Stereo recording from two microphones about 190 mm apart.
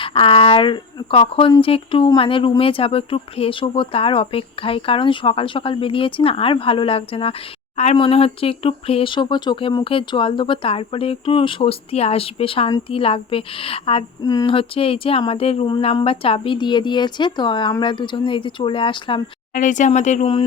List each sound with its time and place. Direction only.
0.0 s speech: 30° left (ahead or behind)
19.5 s speech: 40° left (ahead or behind)